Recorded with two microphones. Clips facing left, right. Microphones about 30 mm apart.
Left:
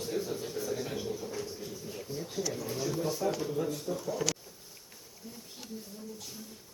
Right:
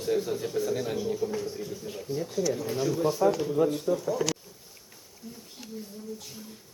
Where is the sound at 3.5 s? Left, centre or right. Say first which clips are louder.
Right 8 dB; right.